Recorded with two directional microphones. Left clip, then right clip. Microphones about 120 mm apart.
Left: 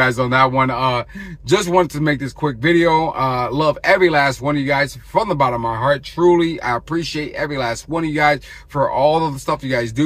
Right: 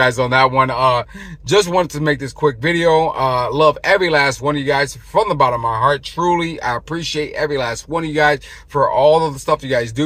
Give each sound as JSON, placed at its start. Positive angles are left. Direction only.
{"t": 0.0, "sound": "speech", "side_deg": -40}
{"t": 1.5, "sound": "speech", "side_deg": -30}
{"t": 2.4, "sound": "speech", "side_deg": -45}